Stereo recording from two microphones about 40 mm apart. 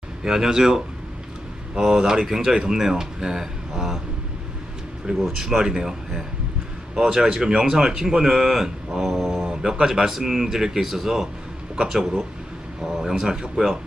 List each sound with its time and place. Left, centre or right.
0.3 s speech: centre
5.4 s speech: centre
8.9 s mantra: centre
9.4 s speech: centre